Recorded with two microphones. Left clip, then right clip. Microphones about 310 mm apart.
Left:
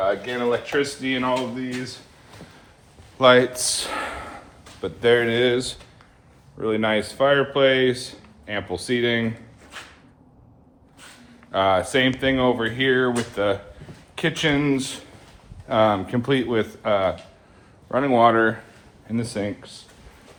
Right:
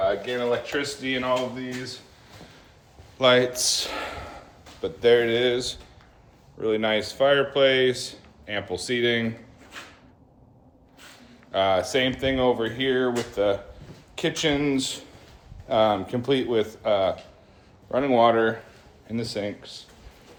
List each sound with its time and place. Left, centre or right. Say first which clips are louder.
0.0 s speech: left 2 dB; centre
3.2 s a man's voice: left 4 dB; centre
9.7 s a sound: left 2 dB; centre
11.5 s speech: left 3 dB; centre